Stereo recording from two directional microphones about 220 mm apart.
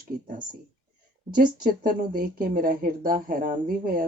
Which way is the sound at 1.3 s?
40° right (ahead or behind).